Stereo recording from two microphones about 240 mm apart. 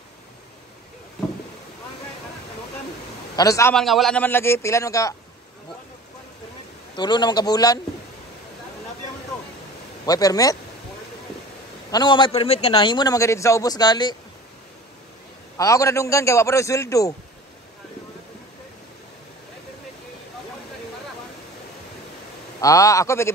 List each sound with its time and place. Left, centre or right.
3.3 s a man's voice: centre
3.7 s a man's voice: centre
7.0 s a man's voice: centre
10.0 s a man's voice: centre
11.9 s a man's voice: centre
15.5 s a man's voice: centre
22.6 s a man's voice: centre